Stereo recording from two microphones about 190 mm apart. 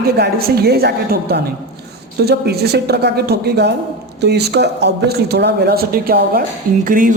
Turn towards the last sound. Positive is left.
turn(degrees=-45)  # may be behind; listen again after turning